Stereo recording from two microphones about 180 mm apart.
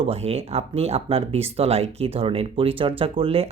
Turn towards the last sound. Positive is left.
turn(degrees=-30)  # may be behind; listen again after turning